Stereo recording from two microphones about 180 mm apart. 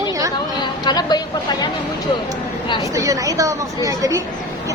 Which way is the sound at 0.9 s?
25° left (ahead or behind).